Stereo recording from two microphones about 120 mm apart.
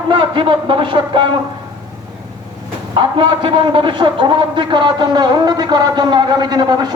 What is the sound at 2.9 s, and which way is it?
A man's voice, 45° right (ahead or behind).